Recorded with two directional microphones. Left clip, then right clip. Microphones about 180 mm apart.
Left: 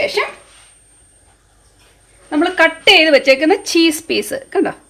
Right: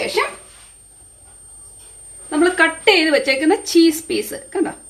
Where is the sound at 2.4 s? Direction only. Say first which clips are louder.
Left 2 dB; 50° left (ahead or behind).